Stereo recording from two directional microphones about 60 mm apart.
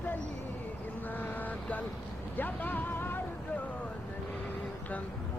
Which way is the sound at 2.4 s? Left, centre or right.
Left.